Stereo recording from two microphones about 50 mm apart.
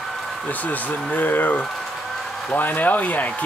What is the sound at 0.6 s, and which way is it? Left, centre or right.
Speech, left.